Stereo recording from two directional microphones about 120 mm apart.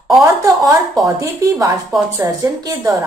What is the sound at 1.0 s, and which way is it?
A woman's voice, 25° right (ahead or behind).